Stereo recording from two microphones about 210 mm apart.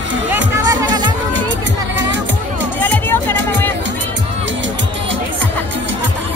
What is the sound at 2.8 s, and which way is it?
Music, 10° left (ahead or behind).